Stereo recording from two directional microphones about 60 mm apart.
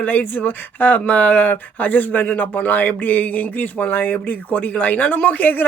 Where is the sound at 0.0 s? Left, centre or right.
Left.